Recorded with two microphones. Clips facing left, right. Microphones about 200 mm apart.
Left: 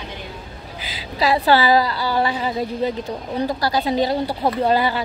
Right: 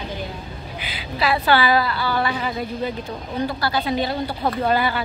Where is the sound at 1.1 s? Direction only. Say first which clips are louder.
Left 2 dB; 35° left (ahead or behind).